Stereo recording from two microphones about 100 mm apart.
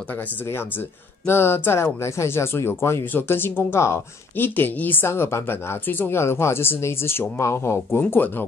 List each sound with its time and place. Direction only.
0.1 s speech: 20° left (ahead or behind)